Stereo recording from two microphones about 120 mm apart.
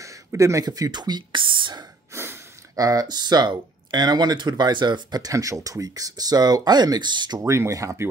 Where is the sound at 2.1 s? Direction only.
20° right (ahead or behind); by 7.4 s 40° right (ahead or behind).